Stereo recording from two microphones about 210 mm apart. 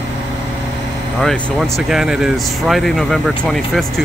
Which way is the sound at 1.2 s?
Centre (ahead or behind).